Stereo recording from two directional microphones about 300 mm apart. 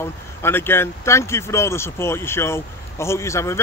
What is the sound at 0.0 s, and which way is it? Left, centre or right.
Speech, centre.